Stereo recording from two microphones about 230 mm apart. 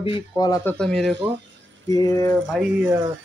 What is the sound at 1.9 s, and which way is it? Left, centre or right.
Speech, centre.